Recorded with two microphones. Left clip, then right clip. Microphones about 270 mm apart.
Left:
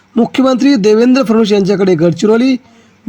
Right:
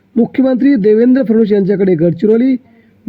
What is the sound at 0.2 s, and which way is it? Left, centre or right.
A man's voice, centre.